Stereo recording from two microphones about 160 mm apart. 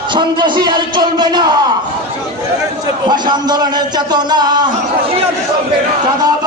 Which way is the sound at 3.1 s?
25° right (ahead or behind).